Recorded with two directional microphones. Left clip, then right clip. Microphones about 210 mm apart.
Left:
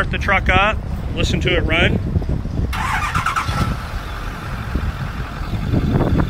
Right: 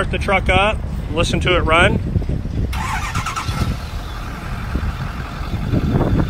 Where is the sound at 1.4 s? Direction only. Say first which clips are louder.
Right 3 dB; 15° right (ahead or behind).